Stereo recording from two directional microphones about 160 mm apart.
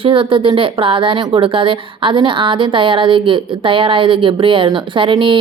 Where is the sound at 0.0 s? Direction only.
30° right (ahead or behind).